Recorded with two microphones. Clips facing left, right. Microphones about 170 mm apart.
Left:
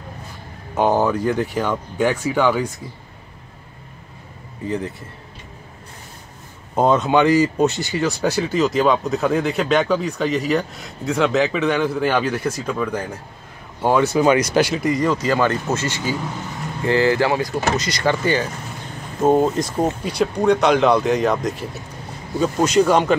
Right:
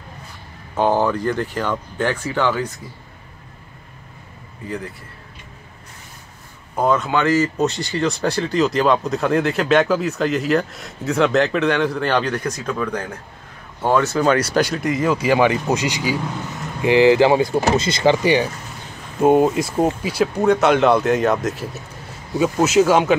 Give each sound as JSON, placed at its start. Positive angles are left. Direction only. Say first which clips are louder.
{"t": 0.7, "sound": "speech", "louder": "even", "side_deg": 15}
{"t": 4.6, "sound": "a man's voice", "louder": "left 4 dB", "side_deg": 20}
{"t": 6.7, "sound": "speech", "louder": "left 2 dB", "side_deg": 20}